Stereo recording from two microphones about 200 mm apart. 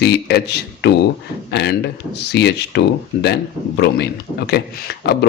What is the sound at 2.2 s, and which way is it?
A man's voice, 60° left (ahead or behind).